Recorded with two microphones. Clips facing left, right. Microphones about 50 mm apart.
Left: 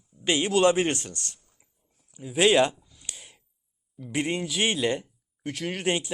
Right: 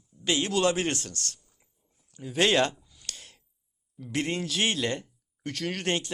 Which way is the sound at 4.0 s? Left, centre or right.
Centre.